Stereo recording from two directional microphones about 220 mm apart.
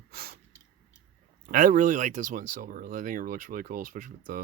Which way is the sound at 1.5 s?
40° right (ahead or behind).